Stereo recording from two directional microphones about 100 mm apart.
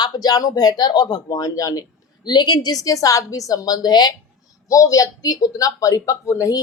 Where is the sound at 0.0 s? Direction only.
40° left (ahead or behind).